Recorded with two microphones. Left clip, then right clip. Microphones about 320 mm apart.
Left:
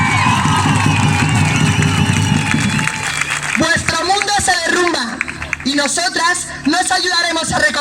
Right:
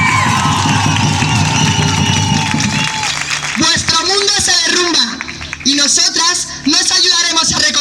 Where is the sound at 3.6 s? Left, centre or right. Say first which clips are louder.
Right 3 dB; centre.